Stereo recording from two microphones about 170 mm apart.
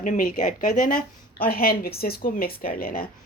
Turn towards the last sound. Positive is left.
turn(degrees=60)  # may be behind; listen again after turning